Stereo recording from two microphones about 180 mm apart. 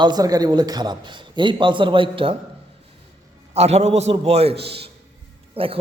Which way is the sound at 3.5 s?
35° right (ahead or behind).